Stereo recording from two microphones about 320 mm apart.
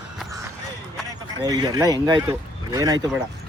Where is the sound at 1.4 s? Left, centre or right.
Centre.